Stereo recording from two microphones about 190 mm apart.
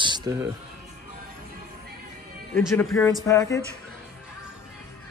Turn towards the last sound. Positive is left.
turn(degrees=15)  # may be behind; listen again after turning